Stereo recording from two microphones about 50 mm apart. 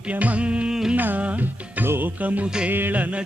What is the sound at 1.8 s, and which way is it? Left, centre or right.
Music, right.